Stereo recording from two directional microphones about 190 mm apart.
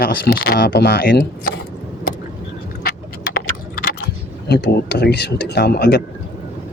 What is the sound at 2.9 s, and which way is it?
Keys jangling, 55° left (ahead or behind).